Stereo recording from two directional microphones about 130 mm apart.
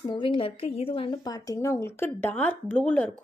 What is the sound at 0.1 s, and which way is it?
A woman's voice, 40° left (ahead or behind).